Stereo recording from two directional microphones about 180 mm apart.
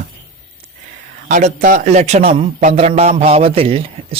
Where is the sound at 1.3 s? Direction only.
45° right (ahead or behind).